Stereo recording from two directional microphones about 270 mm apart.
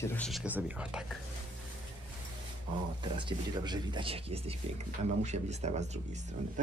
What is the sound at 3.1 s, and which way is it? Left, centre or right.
Speech, centre.